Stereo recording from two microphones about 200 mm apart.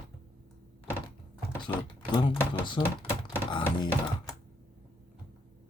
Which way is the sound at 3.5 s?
25° left (ahead or behind).